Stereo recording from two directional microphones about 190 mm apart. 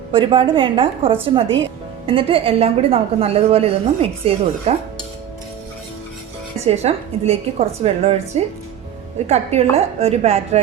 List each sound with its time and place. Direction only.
0.1 s a woman's voice: 25° right (ahead or behind)
6.7 s a woman's voice: 35° right (ahead or behind)